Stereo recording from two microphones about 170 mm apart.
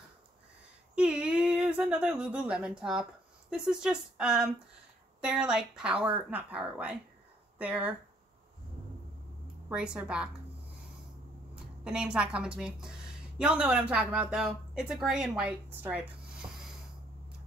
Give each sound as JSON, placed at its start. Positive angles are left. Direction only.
{"t": 0.9, "sound": "speech", "side_deg": -5}
{"t": 9.7, "sound": "a woman's voice", "side_deg": -5}
{"t": 11.8, "sound": "a woman's voice", "side_deg": -5}